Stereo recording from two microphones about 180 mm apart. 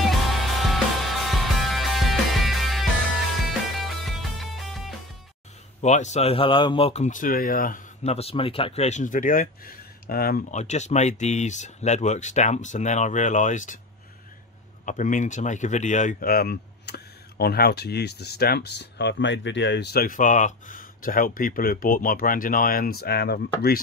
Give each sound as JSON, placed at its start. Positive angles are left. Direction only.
{"t": 0.0, "sound": "music", "side_deg": 0}
{"t": 5.8, "sound": "speech", "side_deg": 40}
{"t": 8.0, "sound": "speech", "side_deg": 35}
{"t": 10.5, "sound": "speech", "side_deg": 40}
{"t": 14.9, "sound": "speech", "side_deg": 45}